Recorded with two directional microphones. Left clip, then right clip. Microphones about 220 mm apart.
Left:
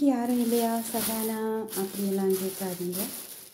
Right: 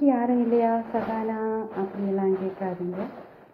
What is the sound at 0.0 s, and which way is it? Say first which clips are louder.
Speech: right 4 dB; 40° left (ahead or behind).